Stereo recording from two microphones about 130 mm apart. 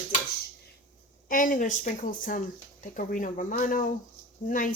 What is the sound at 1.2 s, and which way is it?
Speech, 90° left.